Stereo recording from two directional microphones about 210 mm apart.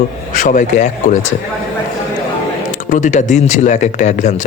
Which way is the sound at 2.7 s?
35° left (ahead or behind).